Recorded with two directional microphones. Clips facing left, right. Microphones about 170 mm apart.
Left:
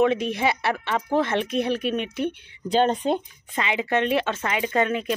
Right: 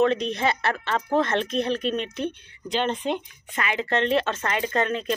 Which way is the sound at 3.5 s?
20° left (ahead or behind).